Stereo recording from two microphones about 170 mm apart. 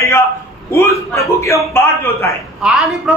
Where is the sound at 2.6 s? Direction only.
Centre (ahead or behind).